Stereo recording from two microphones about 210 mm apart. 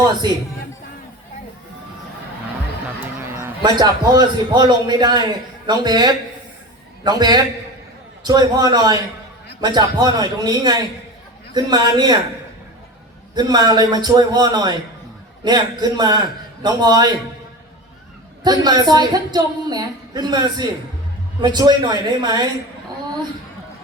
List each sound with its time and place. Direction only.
3.0 s a sound: 10° right (ahead or behind)
3.6 s speech: 20° right (ahead or behind)
13.3 s speech: 20° right (ahead or behind)
18.4 s speech: 20° right (ahead or behind)